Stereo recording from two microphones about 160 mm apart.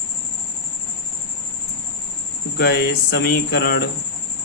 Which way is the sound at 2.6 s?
80° left.